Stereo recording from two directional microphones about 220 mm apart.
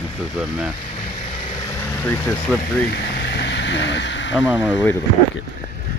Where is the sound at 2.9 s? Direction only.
50° left (ahead or behind).